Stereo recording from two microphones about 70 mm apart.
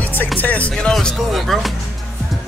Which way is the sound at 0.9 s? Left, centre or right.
Centre.